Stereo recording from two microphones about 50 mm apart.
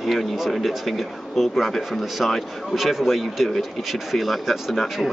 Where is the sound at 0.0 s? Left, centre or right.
Centre.